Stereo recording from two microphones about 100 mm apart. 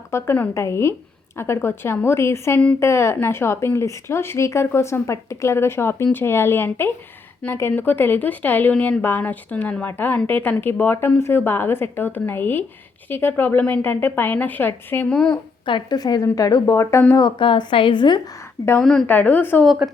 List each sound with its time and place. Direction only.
0.1 s speech: 25° left (ahead or behind); by 15.4 s 10° left (ahead or behind)
15.6 s speech: 55° left (ahead or behind)
16.0 s a woman's voice: 40° left (ahead or behind)
17.2 s a woman's voice: 45° left (ahead or behind)
18.8 s a woman's voice: 5° left (ahead or behind)
19.0 s speech: 20° left (ahead or behind)
19.6 s a woman's voice: 5° right (ahead or behind)